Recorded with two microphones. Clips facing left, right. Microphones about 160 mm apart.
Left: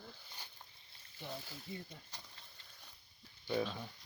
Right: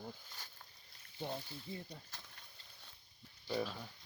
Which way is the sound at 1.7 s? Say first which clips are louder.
Even; 30° right (ahead or behind).